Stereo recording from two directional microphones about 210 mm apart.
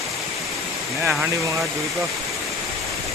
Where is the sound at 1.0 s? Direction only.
5° right (ahead or behind).